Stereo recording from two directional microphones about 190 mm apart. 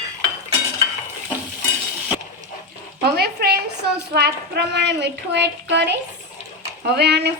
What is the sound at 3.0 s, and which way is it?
Speech, 55° right (ahead or behind).